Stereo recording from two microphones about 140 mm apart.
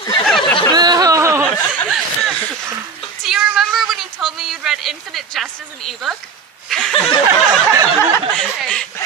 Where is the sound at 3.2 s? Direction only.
5° right (ahead or behind).